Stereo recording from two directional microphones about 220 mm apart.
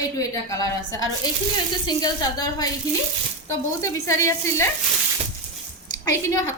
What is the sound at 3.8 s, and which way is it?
Speech, 15° left (ahead or behind).